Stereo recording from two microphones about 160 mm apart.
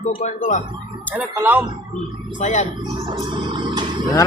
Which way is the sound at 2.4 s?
50° left (ahead or behind).